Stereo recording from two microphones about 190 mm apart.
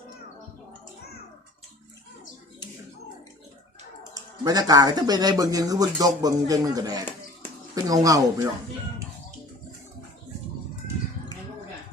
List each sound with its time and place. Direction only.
4.1 s speech: 20° right (ahead or behind)